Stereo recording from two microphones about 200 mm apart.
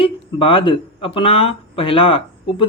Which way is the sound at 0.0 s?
25° left (ahead or behind).